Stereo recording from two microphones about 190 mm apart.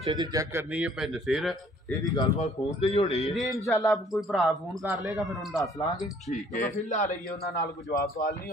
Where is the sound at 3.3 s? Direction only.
Centre (ahead or behind).